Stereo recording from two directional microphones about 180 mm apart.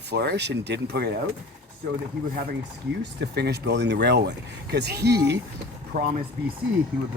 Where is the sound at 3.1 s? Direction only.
65° right (ahead or behind).